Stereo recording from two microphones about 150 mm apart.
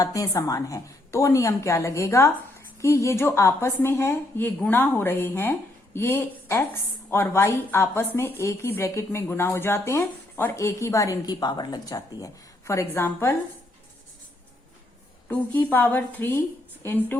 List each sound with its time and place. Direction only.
0.0 s a woman's voice: 20° left (ahead or behind)
15.3 s a woman's voice: 10° left (ahead or behind)